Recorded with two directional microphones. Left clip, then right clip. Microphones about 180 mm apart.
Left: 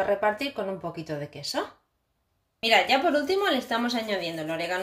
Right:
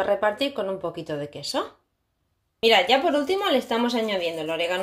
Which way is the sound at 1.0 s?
25° right (ahead or behind).